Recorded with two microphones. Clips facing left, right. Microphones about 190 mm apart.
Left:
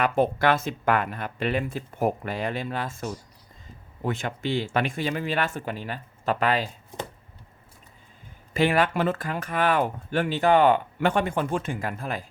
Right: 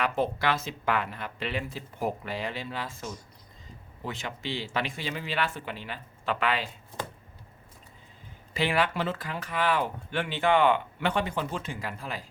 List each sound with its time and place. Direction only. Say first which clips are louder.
0.0 s speech: left 5 dB; 50° left (ahead or behind)
8.5 s speech: left 5 dB; 45° left (ahead or behind)